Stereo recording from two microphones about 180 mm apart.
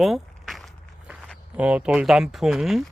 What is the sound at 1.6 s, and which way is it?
Speech, 5° right (ahead or behind).